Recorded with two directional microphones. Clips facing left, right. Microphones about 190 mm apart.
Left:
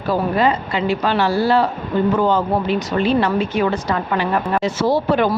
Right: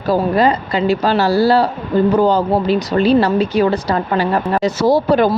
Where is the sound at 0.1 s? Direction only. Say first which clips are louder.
Right 3 dB; 40° right (ahead or behind).